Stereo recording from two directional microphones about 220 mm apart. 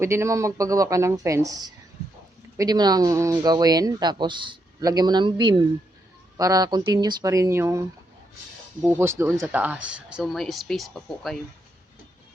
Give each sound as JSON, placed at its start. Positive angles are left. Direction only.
{"t": 0.0, "sound": "speech", "side_deg": -10}